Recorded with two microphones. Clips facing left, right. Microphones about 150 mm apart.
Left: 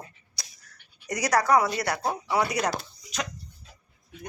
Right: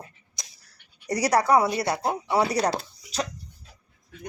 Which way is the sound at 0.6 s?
30° right (ahead or behind).